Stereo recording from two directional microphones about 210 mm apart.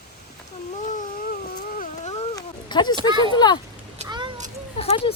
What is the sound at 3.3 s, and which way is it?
Speech, 20° left (ahead or behind).